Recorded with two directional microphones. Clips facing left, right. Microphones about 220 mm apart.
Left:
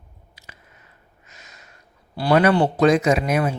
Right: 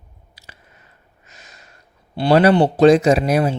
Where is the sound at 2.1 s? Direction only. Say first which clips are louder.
Right 4 dB; 30° right (ahead or behind).